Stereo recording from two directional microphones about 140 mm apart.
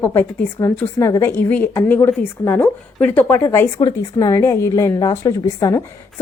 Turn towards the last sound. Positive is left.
turn(degrees=25)  # may be behind; listen again after turning